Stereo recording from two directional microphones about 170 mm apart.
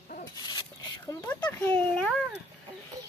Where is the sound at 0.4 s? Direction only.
25° left (ahead or behind).